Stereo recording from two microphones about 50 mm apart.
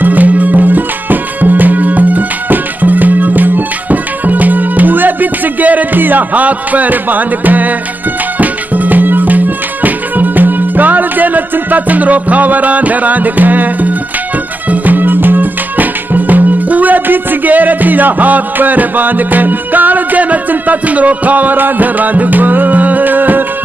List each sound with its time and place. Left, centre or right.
0.0 s music: right